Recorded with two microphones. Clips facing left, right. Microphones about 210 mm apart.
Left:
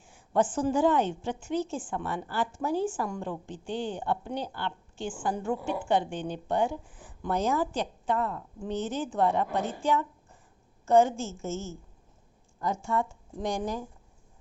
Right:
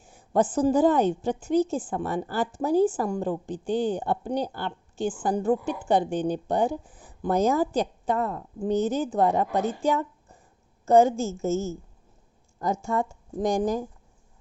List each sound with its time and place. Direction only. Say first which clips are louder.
0.0 s a woman's voice: right 3 dB; 40° right (ahead or behind)